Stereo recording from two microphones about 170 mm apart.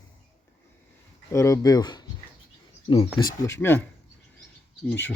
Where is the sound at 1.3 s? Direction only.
20° left (ahead or behind).